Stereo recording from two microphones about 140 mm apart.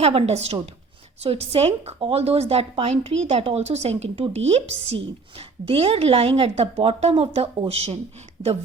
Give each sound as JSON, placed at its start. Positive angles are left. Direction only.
{"t": 0.0, "sound": "a woman's voice", "side_deg": -45}
{"t": 8.4, "sound": "a woman's voice", "side_deg": -30}